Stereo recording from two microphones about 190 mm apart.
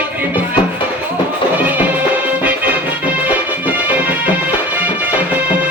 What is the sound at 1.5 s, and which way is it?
Music, 10° right (ahead or behind).